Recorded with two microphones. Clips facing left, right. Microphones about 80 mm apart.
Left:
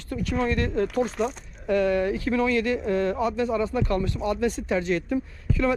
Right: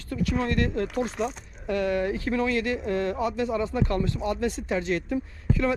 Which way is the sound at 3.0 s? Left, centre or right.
Left.